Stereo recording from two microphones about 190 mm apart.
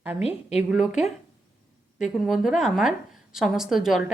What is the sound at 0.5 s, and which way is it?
A woman's voice, 5° right (ahead or behind).